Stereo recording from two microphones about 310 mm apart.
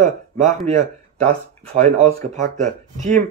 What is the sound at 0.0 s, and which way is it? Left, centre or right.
Speech, right.